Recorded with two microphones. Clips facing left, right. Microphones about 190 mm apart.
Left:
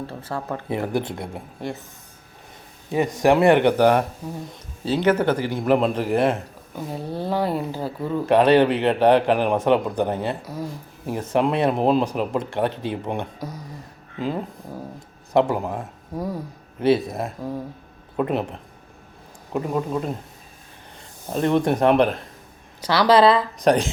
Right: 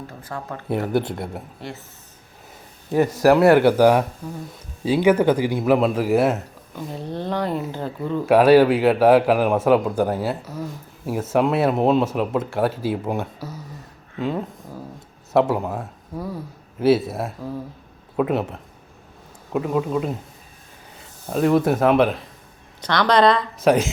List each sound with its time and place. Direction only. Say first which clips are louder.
0.1 s speech: left 4 dB; 30° left (ahead or behind)
0.7 s speech: right 3 dB; 5° right (ahead or behind)
2.9 s speech: right 2 dB; 5° right (ahead or behind)
7.1 s speech: left 1 dB; 5° left (ahead or behind)
8.3 s speech: right 3 dB; 5° right (ahead or behind)
10.4 s speech: even; 10° left (ahead or behind)
10.7 s speech: right 1 dB; 5° right (ahead or behind)
16.1 s speech: left 2 dB; 15° left (ahead or behind)
16.8 s speech: right 2 dB; 5° right (ahead or behind)
19.5 s speech: right 2 dB; centre (ahead or behind)
21.3 s speech: right 2 dB; 5° right (ahead or behind)